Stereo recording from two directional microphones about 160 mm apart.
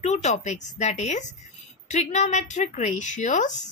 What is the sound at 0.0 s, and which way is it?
A woman's voice, 45° left (ahead or behind).